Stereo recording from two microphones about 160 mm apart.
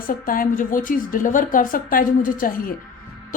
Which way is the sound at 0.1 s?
60° left (ahead or behind).